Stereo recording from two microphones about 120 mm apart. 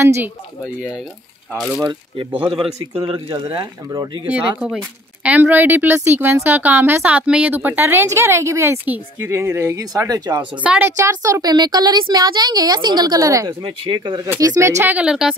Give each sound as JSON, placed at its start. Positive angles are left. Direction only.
{"t": 0.7, "sound": "a woman's voice", "side_deg": -10}
{"t": 2.5, "sound": "a woman's voice", "side_deg": -40}
{"t": 3.5, "sound": "a woman's voice", "side_deg": -35}
{"t": 4.3, "sound": "a woman's voice", "side_deg": -10}
{"t": 10.6, "sound": "a woman's voice", "side_deg": -15}
{"t": 14.4, "sound": "a woman's voice", "side_deg": -20}